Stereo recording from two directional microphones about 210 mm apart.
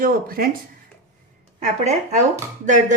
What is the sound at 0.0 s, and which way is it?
Speech, 45° right (ahead or behind).